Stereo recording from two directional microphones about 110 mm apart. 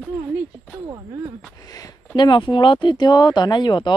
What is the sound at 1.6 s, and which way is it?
Speech, 35° left (ahead or behind).